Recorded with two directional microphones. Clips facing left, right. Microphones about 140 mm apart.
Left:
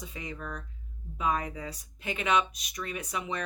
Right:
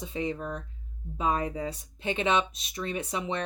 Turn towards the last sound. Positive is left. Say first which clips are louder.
# right 3 dB
turn(degrees=-30)  # may be behind; listen again after turning